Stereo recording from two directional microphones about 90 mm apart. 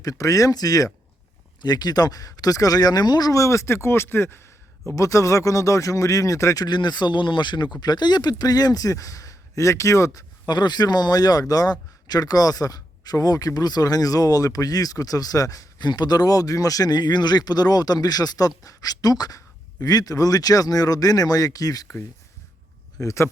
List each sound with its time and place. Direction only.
0.0 s speech: 40° left (ahead or behind)
23.0 s speech: 35° left (ahead or behind)